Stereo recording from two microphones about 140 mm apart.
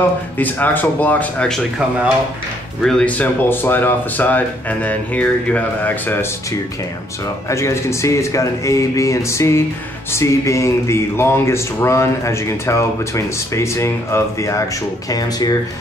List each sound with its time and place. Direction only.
0.4 s speech: 15° left (ahead or behind)
2.8 s speech: 5° left (ahead or behind)
7.4 s speech: 20° left (ahead or behind)